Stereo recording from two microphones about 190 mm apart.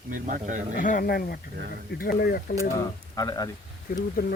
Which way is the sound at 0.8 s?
45° left (ahead or behind).